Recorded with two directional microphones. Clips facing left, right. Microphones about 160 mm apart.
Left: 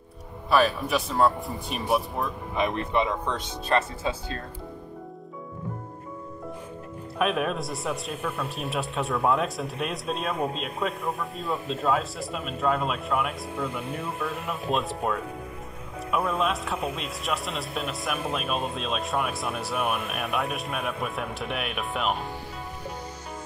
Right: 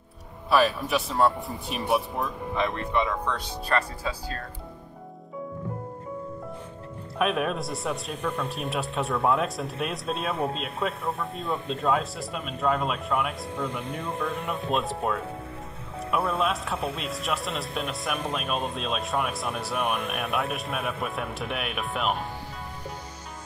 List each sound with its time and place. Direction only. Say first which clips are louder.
0.5 s speech: even; centre (ahead or behind)
2.5 s speech: left 1 dB; 20° left (ahead or behind)
7.2 s speech: even; centre (ahead or behind)